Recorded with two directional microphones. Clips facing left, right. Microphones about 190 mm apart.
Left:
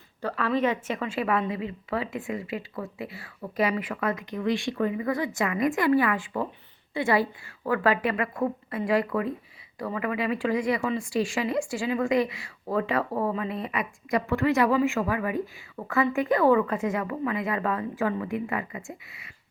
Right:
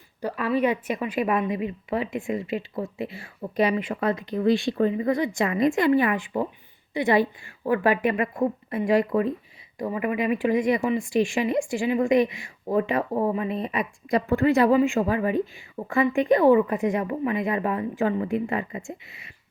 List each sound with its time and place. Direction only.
0.2 s a woman's voice: 15° right (ahead or behind)